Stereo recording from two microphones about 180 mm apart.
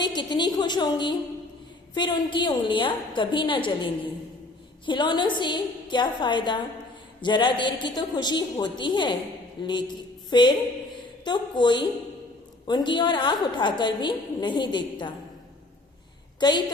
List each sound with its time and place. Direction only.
0.0 s a woman's voice: 25° left (ahead or behind)
10.2 s a woman's voice: 25° left (ahead or behind)
16.4 s a woman's voice: 25° left (ahead or behind)